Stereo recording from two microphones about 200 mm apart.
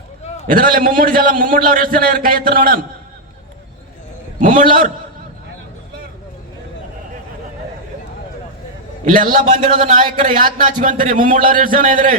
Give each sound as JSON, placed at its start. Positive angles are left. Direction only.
{"t": 0.4, "sound": "a man's voice", "side_deg": -45}
{"t": 4.4, "sound": "a man's voice", "side_deg": -40}
{"t": 9.0, "sound": "a man's voice", "side_deg": -45}